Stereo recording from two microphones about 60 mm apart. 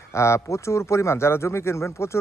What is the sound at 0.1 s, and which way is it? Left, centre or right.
Speech, left.